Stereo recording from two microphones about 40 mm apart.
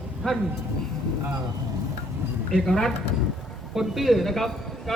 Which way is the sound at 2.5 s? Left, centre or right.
Centre.